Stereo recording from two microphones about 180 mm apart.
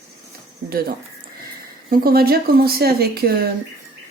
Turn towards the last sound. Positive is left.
turn(degrees=-60)  # may be behind; listen again after turning